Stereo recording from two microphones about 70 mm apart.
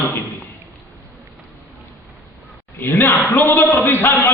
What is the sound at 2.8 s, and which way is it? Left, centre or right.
A man's voice, left.